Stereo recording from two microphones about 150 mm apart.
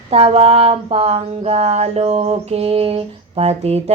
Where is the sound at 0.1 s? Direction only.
40° right (ahead or behind).